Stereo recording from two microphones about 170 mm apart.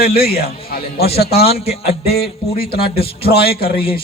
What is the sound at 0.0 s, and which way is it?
A man's voice, 65° left (ahead or behind).